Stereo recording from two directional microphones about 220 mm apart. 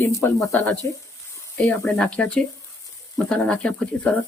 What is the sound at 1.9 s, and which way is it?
Speech, 5° left (ahead or behind).